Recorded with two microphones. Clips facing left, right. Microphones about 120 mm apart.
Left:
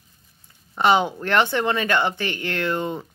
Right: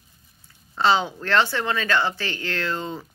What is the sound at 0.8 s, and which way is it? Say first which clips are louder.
A woman's voice: left 2 dB; 15° left (ahead or behind).